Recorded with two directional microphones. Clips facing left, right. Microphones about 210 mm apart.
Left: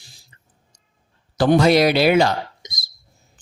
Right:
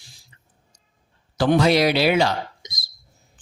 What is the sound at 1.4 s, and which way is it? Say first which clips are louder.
Speech: left 3 dB; 45° left (ahead or behind).